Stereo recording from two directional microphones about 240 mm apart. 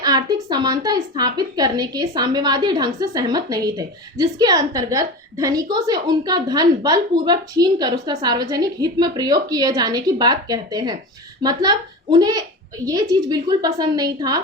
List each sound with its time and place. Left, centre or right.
0.0 s a woman's voice: centre